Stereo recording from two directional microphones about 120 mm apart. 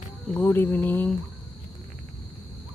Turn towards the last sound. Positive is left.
turn(degrees=15)  # may be behind; listen again after turning